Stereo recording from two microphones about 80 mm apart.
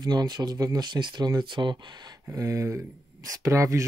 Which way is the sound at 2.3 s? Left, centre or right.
Right.